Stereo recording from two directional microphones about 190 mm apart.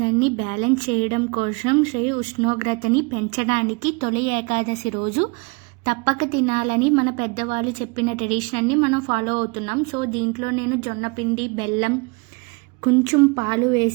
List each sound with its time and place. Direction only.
0.0 s a woman's voice: 30° right (ahead or behind)